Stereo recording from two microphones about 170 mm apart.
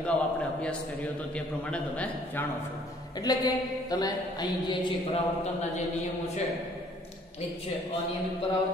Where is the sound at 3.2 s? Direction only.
25° left (ahead or behind).